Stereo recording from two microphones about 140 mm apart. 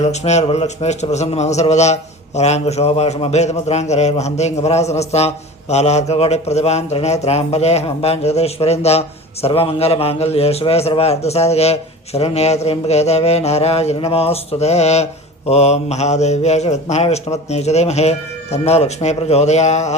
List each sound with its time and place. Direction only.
0.0 s a man's voice: 55° left (ahead or behind)